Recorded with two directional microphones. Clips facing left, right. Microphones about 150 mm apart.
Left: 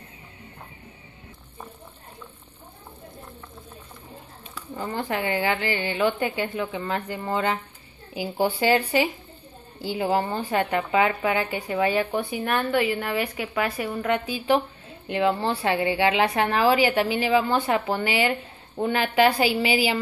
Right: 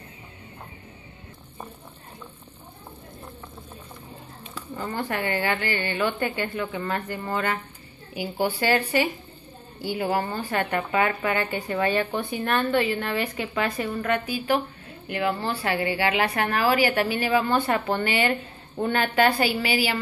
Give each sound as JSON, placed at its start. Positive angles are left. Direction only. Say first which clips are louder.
{"t": 4.7, "sound": "a woman's voice", "louder": "left 1 dB", "side_deg": 15}